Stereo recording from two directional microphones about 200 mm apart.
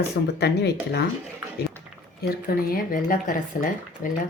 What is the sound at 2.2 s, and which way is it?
Speech, 50° left (ahead or behind).